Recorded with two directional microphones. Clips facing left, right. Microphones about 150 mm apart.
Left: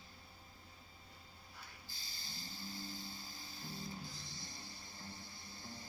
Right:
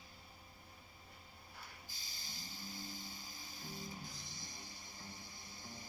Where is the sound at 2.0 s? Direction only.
15° right (ahead or behind).